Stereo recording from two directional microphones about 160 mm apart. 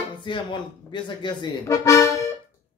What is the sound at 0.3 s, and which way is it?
Speech, 30° left (ahead or behind).